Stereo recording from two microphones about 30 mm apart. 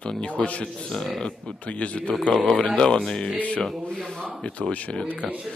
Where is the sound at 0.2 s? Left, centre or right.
Left.